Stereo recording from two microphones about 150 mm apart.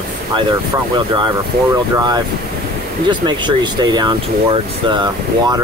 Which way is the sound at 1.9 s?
25° right (ahead or behind).